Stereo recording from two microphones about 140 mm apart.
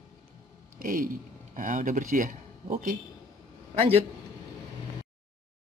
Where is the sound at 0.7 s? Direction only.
80° right.